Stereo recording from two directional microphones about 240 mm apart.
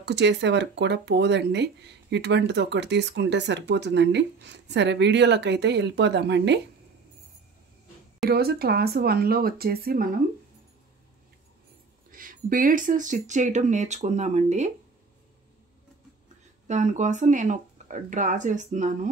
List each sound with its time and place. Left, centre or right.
0.0 s speech: right
8.3 s speech: right
12.1 s speech: right
16.6 s speech: right